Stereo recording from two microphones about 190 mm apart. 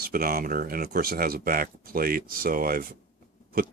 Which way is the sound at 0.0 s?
50° right (ahead or behind).